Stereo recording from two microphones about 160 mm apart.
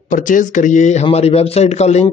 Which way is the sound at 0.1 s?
55° left (ahead or behind).